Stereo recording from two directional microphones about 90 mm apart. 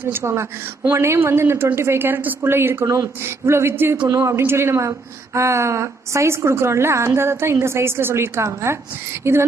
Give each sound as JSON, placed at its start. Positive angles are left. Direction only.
{"t": 0.1, "sound": "a woman's voice", "side_deg": -30}
{"t": 4.1, "sound": "a woman's voice", "side_deg": -35}